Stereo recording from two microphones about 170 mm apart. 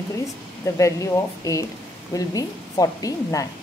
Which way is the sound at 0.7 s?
20° left (ahead or behind).